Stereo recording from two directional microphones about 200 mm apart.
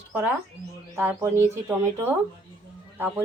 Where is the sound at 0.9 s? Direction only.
15° right (ahead or behind).